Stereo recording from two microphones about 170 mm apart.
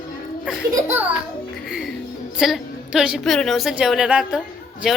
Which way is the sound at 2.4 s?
5° right (ahead or behind).